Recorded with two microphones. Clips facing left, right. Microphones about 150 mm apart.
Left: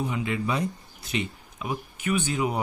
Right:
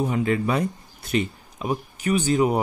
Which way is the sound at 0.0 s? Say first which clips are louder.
Right 6 dB; 45° right (ahead or behind).